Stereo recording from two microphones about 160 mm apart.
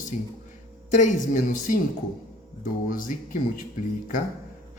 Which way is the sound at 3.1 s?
55° left (ahead or behind).